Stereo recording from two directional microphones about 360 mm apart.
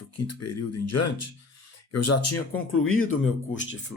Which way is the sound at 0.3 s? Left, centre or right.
Left.